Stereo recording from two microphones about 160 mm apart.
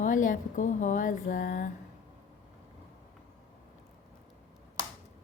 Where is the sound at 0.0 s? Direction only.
55° left (ahead or behind).